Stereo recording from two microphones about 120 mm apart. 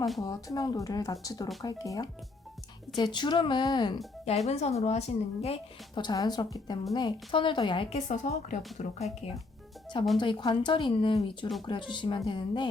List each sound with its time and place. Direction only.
0.2 s speech: 30° left (ahead or behind)
4.4 s speech: 65° left (ahead or behind)
5.9 s a woman's voice: 35° left (ahead or behind)
7.9 s a woman's voice: 80° left
10.2 s a woman's voice: 40° left (ahead or behind)